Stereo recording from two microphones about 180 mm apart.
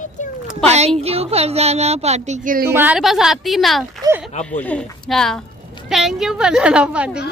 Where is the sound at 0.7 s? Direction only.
35° right (ahead or behind).